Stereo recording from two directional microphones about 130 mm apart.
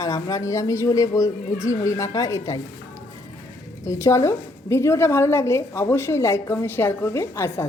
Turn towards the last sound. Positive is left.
turn(degrees=20)  # may be behind; listen again after turning